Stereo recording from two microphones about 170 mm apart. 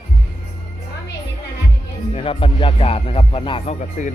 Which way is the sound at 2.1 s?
35° left (ahead or behind).